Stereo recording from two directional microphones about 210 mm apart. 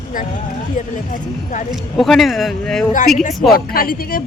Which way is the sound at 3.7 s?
45° left (ahead or behind).